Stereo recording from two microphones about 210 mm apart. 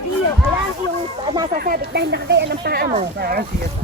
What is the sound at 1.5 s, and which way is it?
Speech, 45° right (ahead or behind).